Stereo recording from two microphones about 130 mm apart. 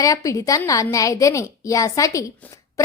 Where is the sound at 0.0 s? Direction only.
25° left (ahead or behind).